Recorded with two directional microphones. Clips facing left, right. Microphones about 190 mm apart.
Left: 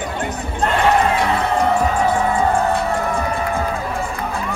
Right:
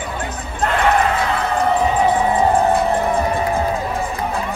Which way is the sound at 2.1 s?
15° right (ahead or behind).